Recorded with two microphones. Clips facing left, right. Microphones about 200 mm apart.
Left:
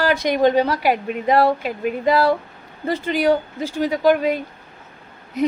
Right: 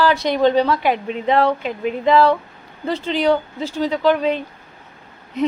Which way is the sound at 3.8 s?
10° left (ahead or behind).